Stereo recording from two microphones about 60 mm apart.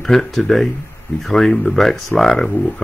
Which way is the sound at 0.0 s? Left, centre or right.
Centre.